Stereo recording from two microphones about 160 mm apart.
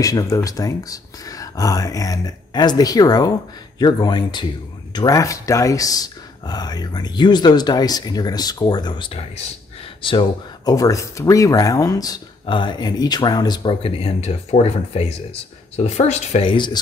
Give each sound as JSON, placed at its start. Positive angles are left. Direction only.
{"t": 0.0, "sound": "speech", "side_deg": 20}